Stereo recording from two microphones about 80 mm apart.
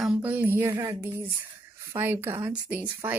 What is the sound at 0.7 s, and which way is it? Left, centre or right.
Speech, right.